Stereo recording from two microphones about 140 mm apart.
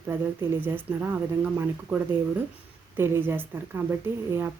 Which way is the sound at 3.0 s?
15° right (ahead or behind).